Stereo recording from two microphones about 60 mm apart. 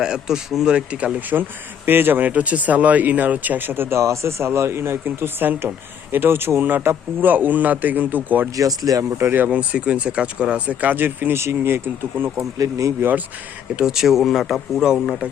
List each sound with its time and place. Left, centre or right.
0.0 s speech: centre; by 1.5 s right
1.9 s speech: right
8.5 s speech: right
9.1 s speech: right
9.5 s speech: centre; by 11.3 s right
11.3 s speech: right
12.5 s speech: right
13.0 s speech: right
13.7 s speech: centre